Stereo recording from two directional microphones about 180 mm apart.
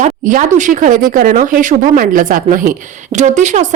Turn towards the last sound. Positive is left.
turn(degrees=-40)  # may be behind; listen again after turning